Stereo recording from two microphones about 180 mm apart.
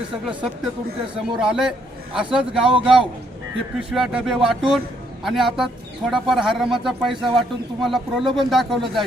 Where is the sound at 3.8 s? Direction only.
5° right (ahead or behind).